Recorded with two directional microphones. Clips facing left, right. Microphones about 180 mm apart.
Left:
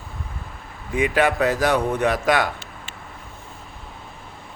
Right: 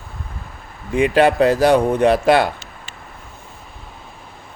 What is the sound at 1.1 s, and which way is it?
Speech, 30° right (ahead or behind).